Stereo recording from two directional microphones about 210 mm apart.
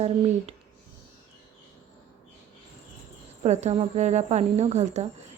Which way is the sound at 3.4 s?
30° right (ahead or behind).